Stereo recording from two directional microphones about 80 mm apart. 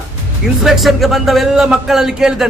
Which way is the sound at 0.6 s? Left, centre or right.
Centre.